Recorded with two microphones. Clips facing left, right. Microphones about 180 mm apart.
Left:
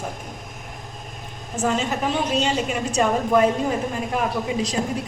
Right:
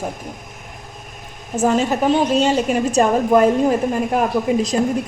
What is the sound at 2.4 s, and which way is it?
A woman's voice, 45° right (ahead or behind).